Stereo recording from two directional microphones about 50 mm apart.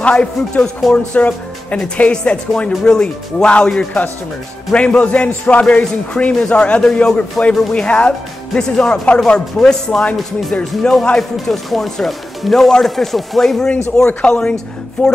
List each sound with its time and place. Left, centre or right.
0.0 s a man's voice: left
9.3 s speech: centre
15.0 s speech: left